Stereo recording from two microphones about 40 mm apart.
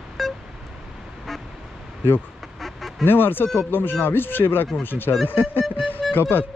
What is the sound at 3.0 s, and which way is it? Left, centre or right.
Speech, left.